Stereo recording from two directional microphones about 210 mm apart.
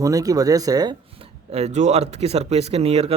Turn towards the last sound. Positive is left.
turn(degrees=-30)  # may be behind; listen again after turning